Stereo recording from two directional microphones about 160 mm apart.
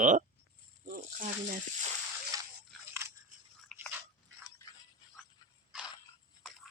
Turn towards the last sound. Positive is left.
turn(degrees=-5)  # may be behind; listen again after turning